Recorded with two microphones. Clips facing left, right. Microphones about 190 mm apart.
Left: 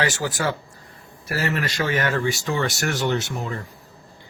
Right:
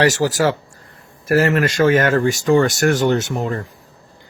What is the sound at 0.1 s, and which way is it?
Speech, 40° right (ahead or behind).